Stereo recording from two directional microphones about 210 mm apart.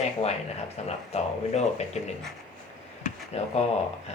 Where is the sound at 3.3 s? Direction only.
30° left (ahead or behind).